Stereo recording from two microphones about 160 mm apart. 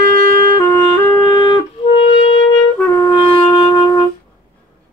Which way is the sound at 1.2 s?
30° left (ahead or behind).